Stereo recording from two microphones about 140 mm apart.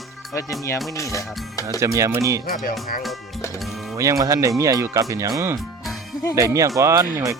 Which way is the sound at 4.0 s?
20° right (ahead or behind).